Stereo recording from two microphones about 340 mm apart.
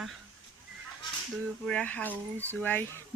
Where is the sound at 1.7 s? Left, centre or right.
Centre.